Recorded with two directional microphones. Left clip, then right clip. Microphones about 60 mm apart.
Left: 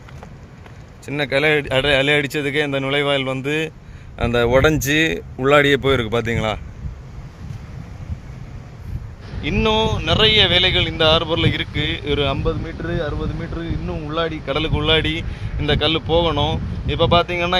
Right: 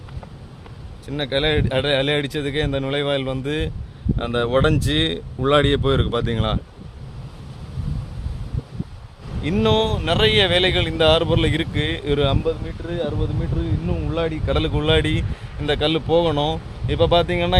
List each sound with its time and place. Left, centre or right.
1.7 s speech: left
4.2 s speech: left
9.4 s speech: right
10.0 s a man's voice: right
14.2 s a man's voice: right
16.8 s a man's voice: right